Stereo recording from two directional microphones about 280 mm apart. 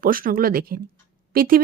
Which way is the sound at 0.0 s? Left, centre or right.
Right.